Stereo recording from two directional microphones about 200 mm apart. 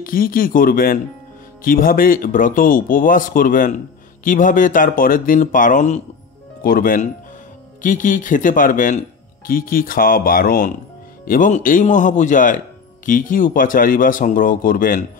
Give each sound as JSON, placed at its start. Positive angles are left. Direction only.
{"t": 0.0, "sound": "speech", "side_deg": 45}